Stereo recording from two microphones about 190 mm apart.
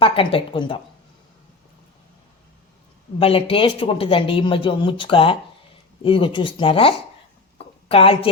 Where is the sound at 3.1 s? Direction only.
30° left (ahead or behind).